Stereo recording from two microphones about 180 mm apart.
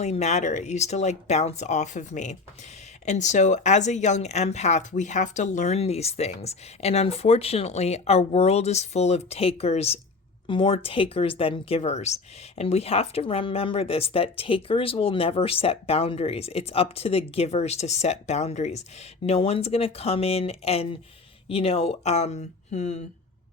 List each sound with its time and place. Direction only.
0.0 s speech: 40° left (ahead or behind)